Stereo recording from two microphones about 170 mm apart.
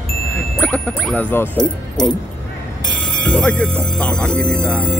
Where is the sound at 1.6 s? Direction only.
25° left (ahead or behind).